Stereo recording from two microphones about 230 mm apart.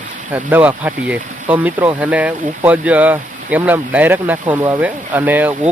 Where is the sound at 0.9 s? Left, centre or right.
Centre.